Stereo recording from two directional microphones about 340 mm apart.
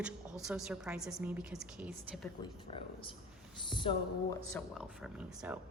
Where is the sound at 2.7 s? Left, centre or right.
Centre.